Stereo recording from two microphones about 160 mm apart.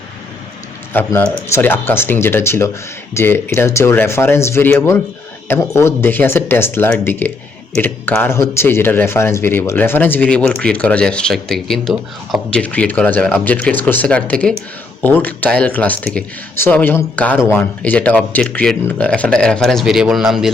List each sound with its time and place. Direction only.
0.9 s speech: 10° left (ahead or behind)